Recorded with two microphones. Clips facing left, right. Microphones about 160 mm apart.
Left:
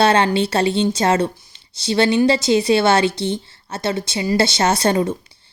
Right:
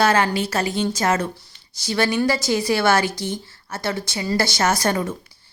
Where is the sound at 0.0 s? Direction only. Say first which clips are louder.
Left 3 dB; 30° left (ahead or behind).